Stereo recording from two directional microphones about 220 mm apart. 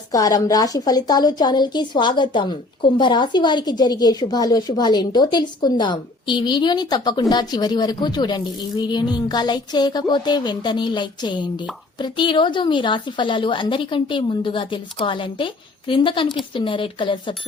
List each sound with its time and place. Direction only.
0.1 s a woman's voice: 15° left (ahead or behind)